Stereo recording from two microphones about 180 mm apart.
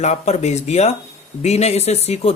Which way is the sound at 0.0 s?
40° left (ahead or behind).